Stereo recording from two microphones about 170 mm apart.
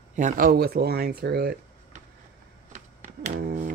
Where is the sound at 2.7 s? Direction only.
45° right (ahead or behind).